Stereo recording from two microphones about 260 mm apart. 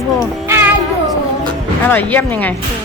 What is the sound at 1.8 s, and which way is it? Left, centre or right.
Speech, centre.